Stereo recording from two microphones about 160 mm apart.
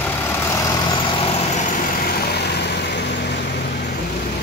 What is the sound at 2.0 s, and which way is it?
Vehicle, 90° left.